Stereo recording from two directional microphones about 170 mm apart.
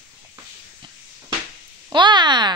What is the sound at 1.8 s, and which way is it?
Speech, 25° right (ahead or behind).